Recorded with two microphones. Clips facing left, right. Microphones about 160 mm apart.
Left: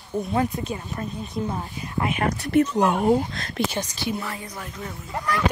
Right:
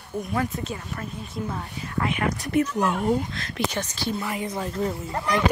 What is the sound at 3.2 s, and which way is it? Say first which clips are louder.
Speech: left 3 dB; 40° left (ahead or behind).